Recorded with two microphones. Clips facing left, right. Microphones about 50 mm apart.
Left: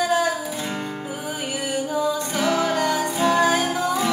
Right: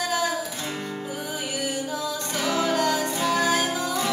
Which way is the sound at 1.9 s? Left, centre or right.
Centre.